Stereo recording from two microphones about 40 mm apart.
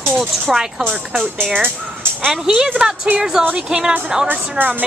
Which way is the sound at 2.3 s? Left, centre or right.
Centre.